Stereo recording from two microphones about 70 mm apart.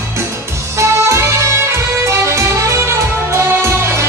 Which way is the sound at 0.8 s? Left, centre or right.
Right.